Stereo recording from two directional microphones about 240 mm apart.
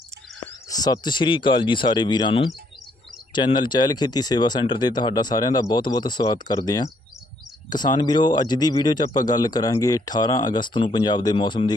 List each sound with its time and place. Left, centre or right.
0.3 s speech: centre